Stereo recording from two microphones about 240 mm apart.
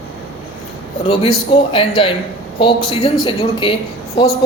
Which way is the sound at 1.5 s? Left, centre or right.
Left.